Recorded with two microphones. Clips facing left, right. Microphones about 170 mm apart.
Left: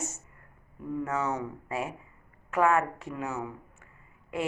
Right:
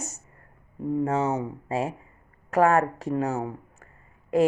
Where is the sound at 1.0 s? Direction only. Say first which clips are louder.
Right 3 dB; 30° right (ahead or behind).